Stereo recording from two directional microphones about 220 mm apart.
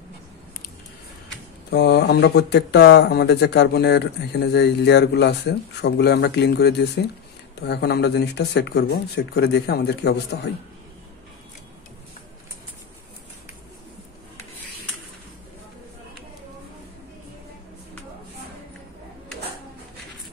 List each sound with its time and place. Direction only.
1.7 s speech: 50° left (ahead or behind)